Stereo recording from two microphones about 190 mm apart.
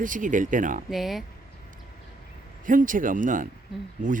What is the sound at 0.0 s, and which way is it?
Speech, 45° right (ahead or behind).